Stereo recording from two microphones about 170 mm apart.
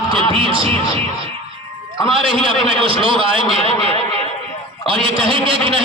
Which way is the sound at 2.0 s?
30° right (ahead or behind).